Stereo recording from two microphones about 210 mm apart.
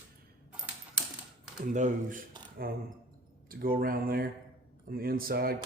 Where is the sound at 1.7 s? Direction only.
35° right (ahead or behind).